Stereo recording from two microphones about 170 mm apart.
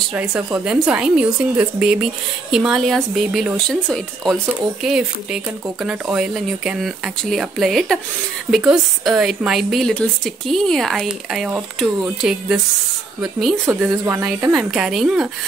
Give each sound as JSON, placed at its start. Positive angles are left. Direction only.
{"t": 0.1, "sound": "speech", "side_deg": -5}
{"t": 13.7, "sound": "a woman's voice", "side_deg": -15}
{"t": 14.5, "sound": "speech", "side_deg": 0}